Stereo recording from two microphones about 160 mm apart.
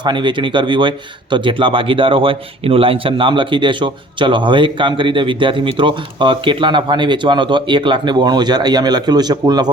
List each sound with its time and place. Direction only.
0.0 s speech: 30° right (ahead or behind)